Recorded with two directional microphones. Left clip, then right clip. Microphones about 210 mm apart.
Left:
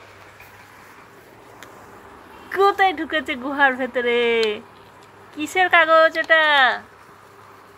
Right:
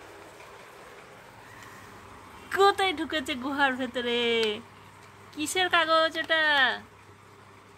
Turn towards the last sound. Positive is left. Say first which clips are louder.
# left 8 dB
turn(degrees=-20)  # may be behind; listen again after turning